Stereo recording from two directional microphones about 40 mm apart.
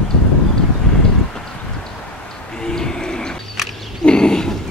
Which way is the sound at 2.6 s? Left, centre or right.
Centre.